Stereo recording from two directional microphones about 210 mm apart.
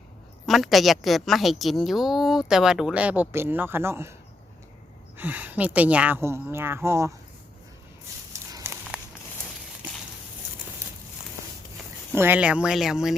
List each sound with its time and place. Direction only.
0.4 s a woman's voice: centre (ahead or behind)
5.1 s speech: 10° right (ahead or behind)
8.3 s a sound: 15° right (ahead or behind)
12.1 s a woman's voice: 10° right (ahead or behind)